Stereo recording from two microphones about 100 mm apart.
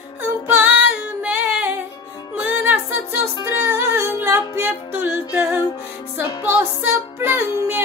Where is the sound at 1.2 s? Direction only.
15° right (ahead or behind).